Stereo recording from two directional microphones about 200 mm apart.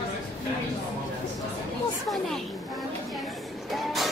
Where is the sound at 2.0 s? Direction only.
Centre (ahead or behind).